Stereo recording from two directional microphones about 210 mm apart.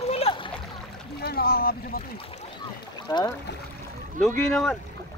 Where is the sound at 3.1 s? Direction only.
15° left (ahead or behind).